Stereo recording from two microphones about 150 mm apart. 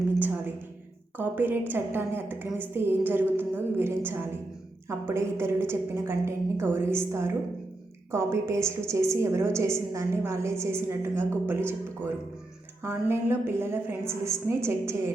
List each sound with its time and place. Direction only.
1.1 s a woman's voice: 15° right (ahead or behind)